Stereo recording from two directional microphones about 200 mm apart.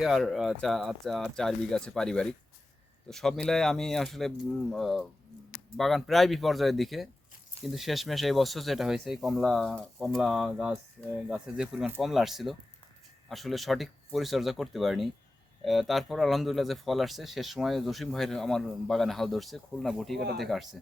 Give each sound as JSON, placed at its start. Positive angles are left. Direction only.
{"t": 0.0, "sound": "speech", "side_deg": 0}